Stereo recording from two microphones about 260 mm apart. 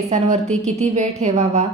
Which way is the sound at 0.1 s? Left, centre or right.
Right.